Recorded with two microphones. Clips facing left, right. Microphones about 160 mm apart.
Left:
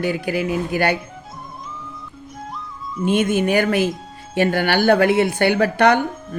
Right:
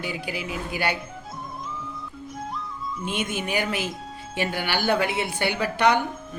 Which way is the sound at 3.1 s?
50° left (ahead or behind).